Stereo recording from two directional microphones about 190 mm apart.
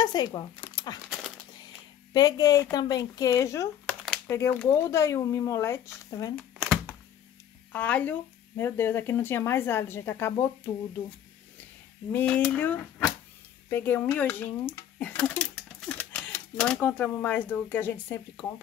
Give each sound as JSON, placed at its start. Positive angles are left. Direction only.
{"t": 0.0, "sound": "a sound", "side_deg": 20}
{"t": 2.1, "sound": "a woman's voice", "side_deg": 20}
{"t": 6.6, "sound": "thunk", "side_deg": 5}
{"t": 7.7, "sound": "speech", "side_deg": 10}
{"t": 12.1, "sound": "speech", "side_deg": 10}